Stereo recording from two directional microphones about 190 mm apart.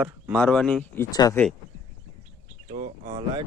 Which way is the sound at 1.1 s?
20° left (ahead or behind).